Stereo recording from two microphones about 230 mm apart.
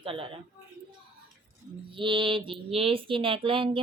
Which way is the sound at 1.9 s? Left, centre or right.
Right.